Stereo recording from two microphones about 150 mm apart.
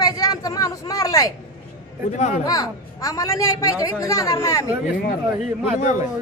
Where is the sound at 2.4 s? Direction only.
25° left (ahead or behind).